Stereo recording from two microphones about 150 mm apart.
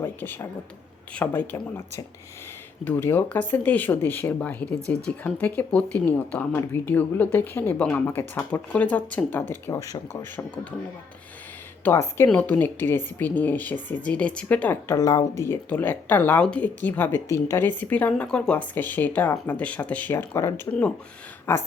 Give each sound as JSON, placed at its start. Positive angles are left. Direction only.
{"t": 0.0, "sound": "speech", "side_deg": 15}
{"t": 2.8, "sound": "speech", "side_deg": 15}
{"t": 9.7, "sound": "speech", "side_deg": 20}
{"t": 10.3, "sound": "speech", "side_deg": 10}
{"t": 11.9, "sound": "speech", "side_deg": 15}
{"t": 14.9, "sound": "speech", "side_deg": 25}